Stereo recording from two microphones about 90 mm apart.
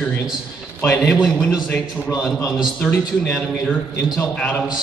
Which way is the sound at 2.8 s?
5° left (ahead or behind).